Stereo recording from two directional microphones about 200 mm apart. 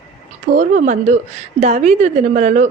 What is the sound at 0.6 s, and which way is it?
A woman's voice, 40° right (ahead or behind).